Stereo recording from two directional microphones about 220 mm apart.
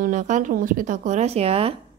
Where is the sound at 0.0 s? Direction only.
35° right (ahead or behind).